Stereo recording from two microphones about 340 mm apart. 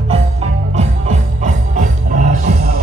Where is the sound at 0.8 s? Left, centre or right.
Centre.